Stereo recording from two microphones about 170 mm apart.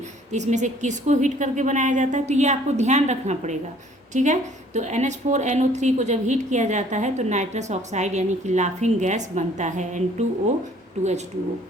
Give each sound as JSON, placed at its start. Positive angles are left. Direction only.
{"t": 0.3, "sound": "a woman's voice", "side_deg": -45}